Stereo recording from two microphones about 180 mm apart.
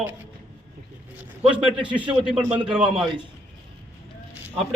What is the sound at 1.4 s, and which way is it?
Speech, 30° right (ahead or behind).